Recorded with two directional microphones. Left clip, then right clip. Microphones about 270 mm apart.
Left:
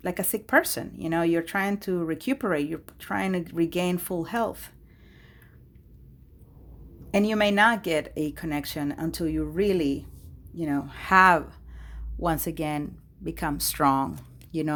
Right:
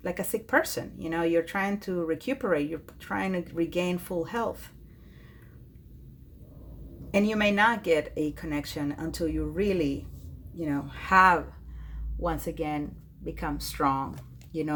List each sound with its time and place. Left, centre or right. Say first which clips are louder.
0.0 s speech: left 1 dB; left
7.1 s speech: left 2 dB; left